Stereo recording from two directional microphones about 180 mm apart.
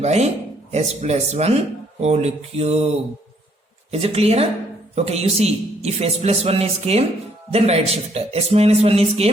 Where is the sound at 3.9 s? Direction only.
35° right (ahead or behind).